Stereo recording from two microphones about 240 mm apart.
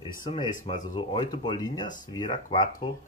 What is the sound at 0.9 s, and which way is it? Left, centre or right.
Speech, centre.